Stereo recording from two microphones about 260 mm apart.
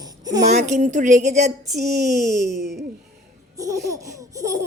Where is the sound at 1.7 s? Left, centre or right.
Right.